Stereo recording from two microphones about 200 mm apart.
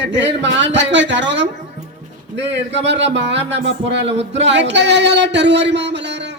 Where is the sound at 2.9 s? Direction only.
60° right (ahead or behind).